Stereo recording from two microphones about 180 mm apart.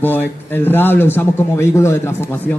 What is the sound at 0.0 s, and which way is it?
A man's voice, 10° left (ahead or behind).